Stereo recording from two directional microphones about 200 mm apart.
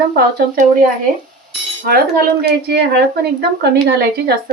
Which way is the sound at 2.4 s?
55° right (ahead or behind).